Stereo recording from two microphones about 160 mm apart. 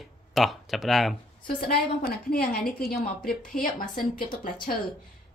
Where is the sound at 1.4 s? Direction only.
70° left (ahead or behind).